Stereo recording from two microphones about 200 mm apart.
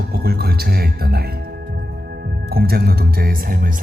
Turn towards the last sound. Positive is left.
turn(degrees=-45)  # may be behind; listen again after turning